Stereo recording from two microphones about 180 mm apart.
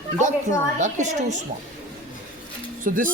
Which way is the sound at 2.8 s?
50° right (ahead or behind).